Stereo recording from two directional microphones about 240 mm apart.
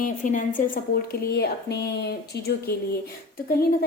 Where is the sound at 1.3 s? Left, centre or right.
Left.